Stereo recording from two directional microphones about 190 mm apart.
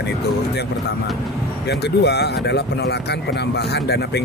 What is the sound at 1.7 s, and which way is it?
Speech, 60° left (ahead or behind).